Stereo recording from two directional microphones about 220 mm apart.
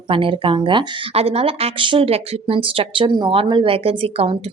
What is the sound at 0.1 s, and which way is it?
Speech, 25° right (ahead or behind).